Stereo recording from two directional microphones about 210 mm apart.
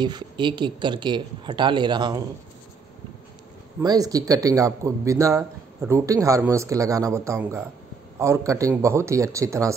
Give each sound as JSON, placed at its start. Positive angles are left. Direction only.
{"t": 0.0, "sound": "speech", "side_deg": -20}
{"t": 3.8, "sound": "speech", "side_deg": -15}